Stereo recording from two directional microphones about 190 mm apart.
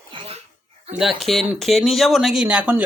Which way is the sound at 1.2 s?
Centre (ahead or behind).